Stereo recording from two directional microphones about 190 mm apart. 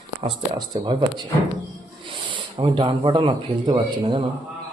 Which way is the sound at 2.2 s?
25° right (ahead or behind).